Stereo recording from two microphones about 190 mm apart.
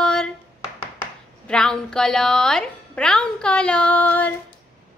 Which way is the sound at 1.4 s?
5° left (ahead or behind).